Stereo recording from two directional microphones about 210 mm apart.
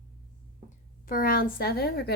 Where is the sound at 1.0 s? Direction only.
45° left (ahead or behind).